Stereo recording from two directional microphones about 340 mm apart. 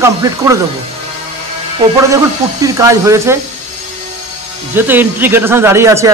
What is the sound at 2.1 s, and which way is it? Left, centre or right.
Speech, centre.